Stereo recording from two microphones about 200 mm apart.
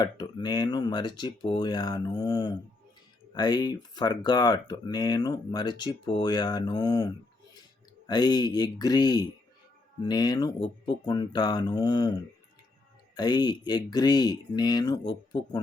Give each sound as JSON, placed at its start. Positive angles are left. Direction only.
{"t": 0.0, "sound": "speech", "side_deg": 20}
{"t": 13.1, "sound": "speech", "side_deg": 20}